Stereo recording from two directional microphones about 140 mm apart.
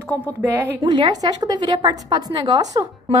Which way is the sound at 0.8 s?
30° right (ahead or behind).